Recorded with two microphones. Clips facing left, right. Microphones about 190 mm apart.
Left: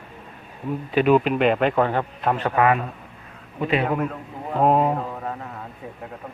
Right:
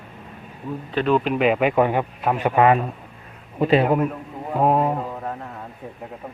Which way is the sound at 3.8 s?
10° right (ahead or behind).